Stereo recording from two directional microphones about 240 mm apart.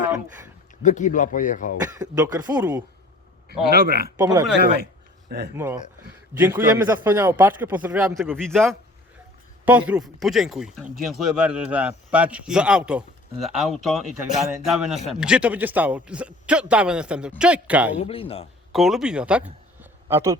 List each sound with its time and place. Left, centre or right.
0.8 s speech: left
1.8 s a man's voice: centre
3.7 s speech: right
4.2 s a man's voice: centre
5.5 s a man's voice: centre
18.0 s a man's voice: left
18.7 s speech: centre
19.8 s a sound: centre